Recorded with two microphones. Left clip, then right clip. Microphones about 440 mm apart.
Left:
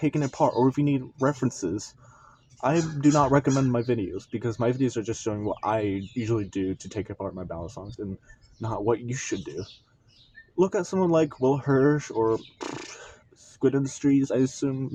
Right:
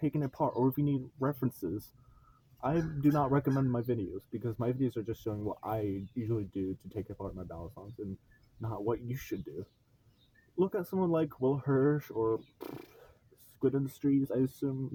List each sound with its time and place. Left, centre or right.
0.0 s speech: right
10.6 s speech: right